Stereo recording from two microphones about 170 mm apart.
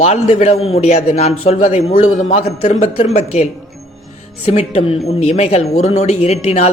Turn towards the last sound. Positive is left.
turn(degrees=40)  # may be behind; listen again after turning